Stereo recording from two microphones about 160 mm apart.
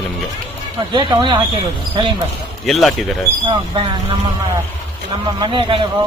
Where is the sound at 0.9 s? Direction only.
30° right (ahead or behind).